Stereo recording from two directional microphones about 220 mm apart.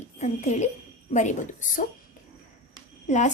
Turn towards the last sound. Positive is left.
turn(degrees=35)  # may be behind; listen again after turning